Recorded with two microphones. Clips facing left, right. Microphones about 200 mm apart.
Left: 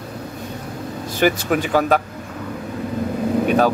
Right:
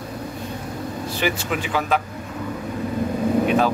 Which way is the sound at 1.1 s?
45° left (ahead or behind).